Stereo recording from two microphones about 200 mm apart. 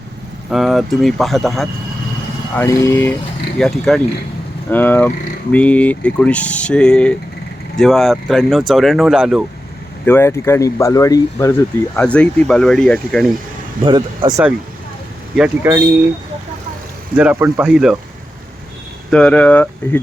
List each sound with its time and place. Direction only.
0.5 s speech: centre (ahead or behind)
2.6 s speech: 10° left (ahead or behind)
10.1 s speech: 10° left (ahead or behind)
13.8 s speech: 25° right (ahead or behind)
15.4 s speech: 10° right (ahead or behind)
17.2 s speech: 5° right (ahead or behind)
19.1 s speech: 5° left (ahead or behind)